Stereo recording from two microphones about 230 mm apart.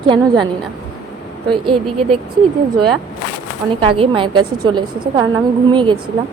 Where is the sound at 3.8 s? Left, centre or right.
Right.